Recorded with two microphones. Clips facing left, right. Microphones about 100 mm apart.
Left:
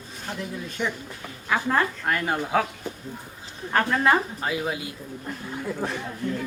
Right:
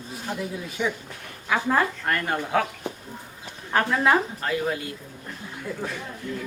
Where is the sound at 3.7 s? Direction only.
5° right (ahead or behind).